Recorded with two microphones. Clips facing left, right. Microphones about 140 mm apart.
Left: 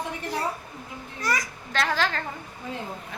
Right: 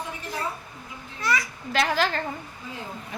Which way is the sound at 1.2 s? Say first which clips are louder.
Right 1 dB; 45° left (ahead or behind).